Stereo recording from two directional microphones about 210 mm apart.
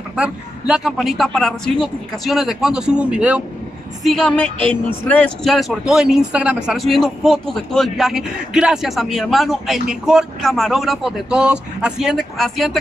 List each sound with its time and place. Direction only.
0.1 s speech: 5° right (ahead or behind)